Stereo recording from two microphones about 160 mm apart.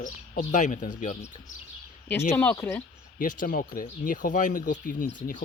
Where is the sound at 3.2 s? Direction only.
60° left (ahead or behind).